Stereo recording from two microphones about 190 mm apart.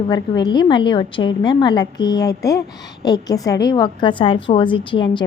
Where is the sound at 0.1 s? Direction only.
20° left (ahead or behind).